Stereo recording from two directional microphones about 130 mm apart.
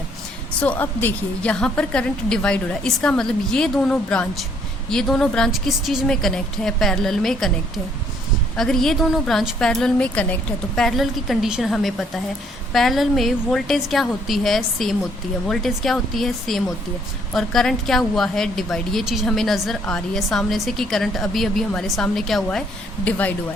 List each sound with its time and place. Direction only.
0.6 s a woman's voice: 15° left (ahead or behind)
8.5 s a woman's voice: 5° left (ahead or behind)